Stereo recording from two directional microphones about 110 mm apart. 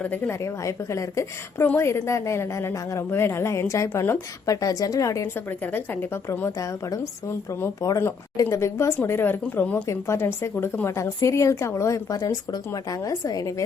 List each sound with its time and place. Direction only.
0.0 s a woman's voice: 15° left (ahead or behind)
0.4 s a woman's voice: 25° left (ahead or behind)
4.4 s a woman's voice: 30° left (ahead or behind)
5.5 s a woman's voice: 15° left (ahead or behind)
6.6 s a woman's voice: 30° left (ahead or behind); by 9.8 s 15° left (ahead or behind)
9.8 s a woman's voice: 25° left (ahead or behind)